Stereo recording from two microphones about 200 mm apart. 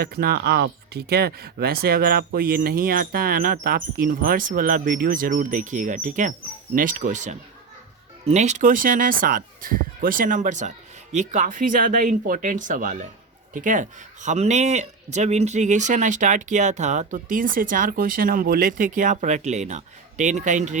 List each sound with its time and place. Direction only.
0.0 s speech: 50° right (ahead or behind)